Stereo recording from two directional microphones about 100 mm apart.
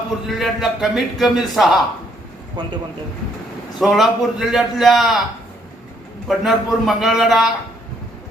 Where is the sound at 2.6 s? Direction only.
45° right (ahead or behind).